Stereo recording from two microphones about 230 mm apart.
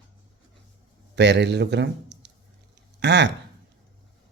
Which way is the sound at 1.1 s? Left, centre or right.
Right.